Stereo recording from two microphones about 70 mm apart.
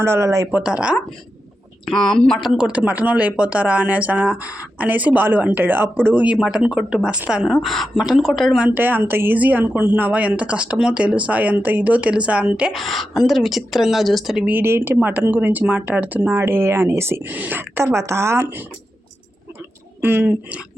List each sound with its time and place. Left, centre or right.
0.0 s speech: right
0.6 s speech: centre
1.8 s speech: centre
2.4 s speech: centre
2.7 s speech: right
6.2 s a woman's voice: centre
8.7 s speech: right
12.7 s a woman's voice: centre
14.5 s speech: right
16.3 s speech: right
17.3 s speech: right
20.0 s speech: right